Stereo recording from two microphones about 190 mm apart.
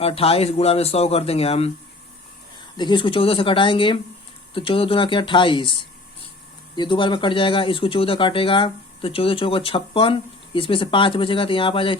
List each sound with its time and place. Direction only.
0.0 s speech: 30° left (ahead or behind)
2.7 s speech: 25° left (ahead or behind)
6.7 s speech: 25° left (ahead or behind)